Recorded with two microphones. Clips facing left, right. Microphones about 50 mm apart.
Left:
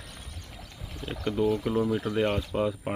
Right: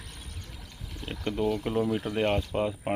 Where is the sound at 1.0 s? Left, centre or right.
Centre.